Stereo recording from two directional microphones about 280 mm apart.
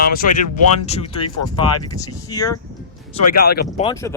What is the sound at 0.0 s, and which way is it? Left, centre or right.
Speech, left.